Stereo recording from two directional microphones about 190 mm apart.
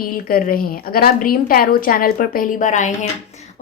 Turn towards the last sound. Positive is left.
turn(degrees=40)  # may be behind; listen again after turning